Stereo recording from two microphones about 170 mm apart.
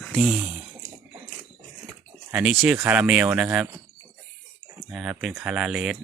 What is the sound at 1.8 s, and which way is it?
Speech, 10° right (ahead or behind).